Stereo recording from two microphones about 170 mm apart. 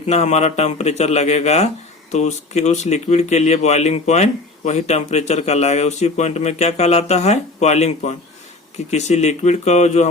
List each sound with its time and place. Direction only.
0.0 s speech: 40° left (ahead or behind)